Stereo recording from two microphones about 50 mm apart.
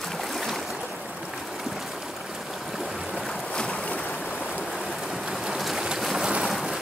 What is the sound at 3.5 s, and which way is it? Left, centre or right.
Boat, left.